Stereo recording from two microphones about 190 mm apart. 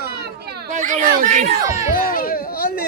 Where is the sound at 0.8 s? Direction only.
40° right (ahead or behind).